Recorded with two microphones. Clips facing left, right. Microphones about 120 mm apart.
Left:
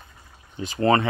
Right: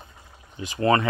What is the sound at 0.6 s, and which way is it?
Speech, 35° left (ahead or behind).